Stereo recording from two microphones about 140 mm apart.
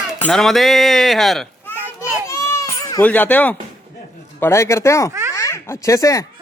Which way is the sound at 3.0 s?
10° left (ahead or behind).